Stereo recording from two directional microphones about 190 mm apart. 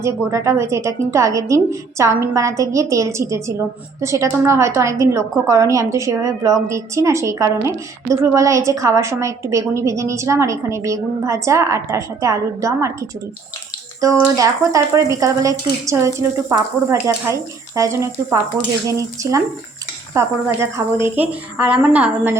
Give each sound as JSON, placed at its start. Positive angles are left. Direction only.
{"t": 0.0, "sound": "a woman's voice", "side_deg": -15}